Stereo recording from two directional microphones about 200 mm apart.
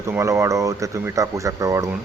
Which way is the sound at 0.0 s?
15° right (ahead or behind).